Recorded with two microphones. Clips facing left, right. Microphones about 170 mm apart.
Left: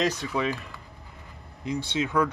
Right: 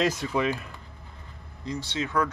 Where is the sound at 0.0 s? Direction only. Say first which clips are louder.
Right 1 dB; 10° right (ahead or behind).